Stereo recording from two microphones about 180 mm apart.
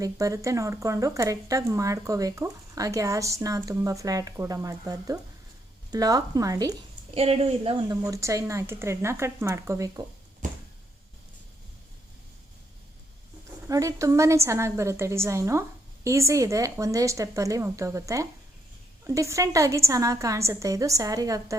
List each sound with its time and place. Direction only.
0.0 s speech: 20° right (ahead or behind)
7.1 s speech: 35° right (ahead or behind)
8.0 s a woman's voice: 20° right (ahead or behind)
10.4 s a sound: 45° right (ahead or behind)
13.7 s a woman's voice: 20° right (ahead or behind)